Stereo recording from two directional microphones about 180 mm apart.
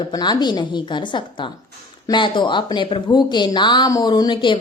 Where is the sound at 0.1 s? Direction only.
25° left (ahead or behind).